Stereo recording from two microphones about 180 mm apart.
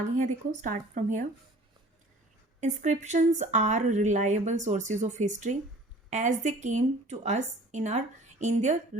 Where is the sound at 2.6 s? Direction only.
40° right (ahead or behind).